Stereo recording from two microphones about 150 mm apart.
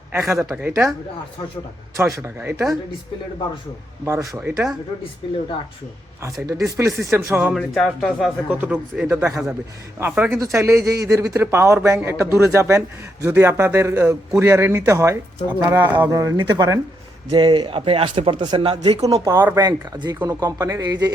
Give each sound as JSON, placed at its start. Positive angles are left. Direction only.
{"t": 0.1, "sound": "a man's voice", "side_deg": -20}
{"t": 2.0, "sound": "a man's voice", "side_deg": -20}
{"t": 4.0, "sound": "a man's voice", "side_deg": -20}
{"t": 6.7, "sound": "a man's voice", "side_deg": -20}
{"t": 7.5, "sound": "a man's voice", "side_deg": 0}
{"t": 17.3, "sound": "speech", "side_deg": -35}
{"t": 19.0, "sound": "a man's voice", "side_deg": -20}
{"t": 19.6, "sound": "a man's voice", "side_deg": -30}